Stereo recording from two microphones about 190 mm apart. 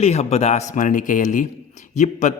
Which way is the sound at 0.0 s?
35° left (ahead or behind).